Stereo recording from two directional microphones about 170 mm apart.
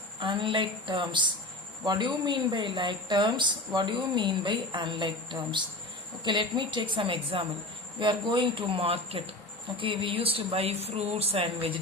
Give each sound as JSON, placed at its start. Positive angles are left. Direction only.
{"t": 0.2, "sound": "a woman's voice", "side_deg": -30}